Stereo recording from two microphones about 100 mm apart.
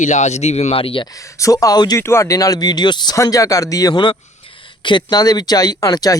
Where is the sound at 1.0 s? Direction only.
35° left (ahead or behind).